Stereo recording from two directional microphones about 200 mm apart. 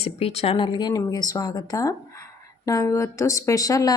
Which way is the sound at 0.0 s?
30° left (ahead or behind).